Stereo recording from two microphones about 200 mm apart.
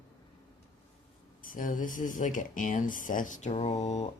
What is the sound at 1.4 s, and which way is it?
Speech, 45° left (ahead or behind).